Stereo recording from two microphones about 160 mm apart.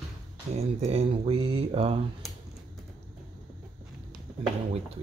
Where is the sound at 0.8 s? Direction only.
40° right (ahead or behind).